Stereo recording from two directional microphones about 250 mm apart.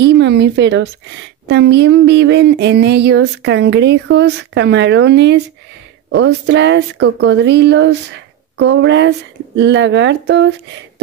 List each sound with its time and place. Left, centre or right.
0.0 s a woman's voice: right